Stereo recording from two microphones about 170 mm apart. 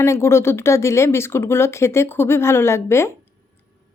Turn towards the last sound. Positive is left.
turn(degrees=15)  # may be behind; listen again after turning